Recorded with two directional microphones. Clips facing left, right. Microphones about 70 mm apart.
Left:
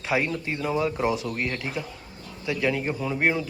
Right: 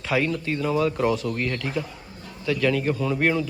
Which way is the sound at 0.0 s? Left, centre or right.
Left.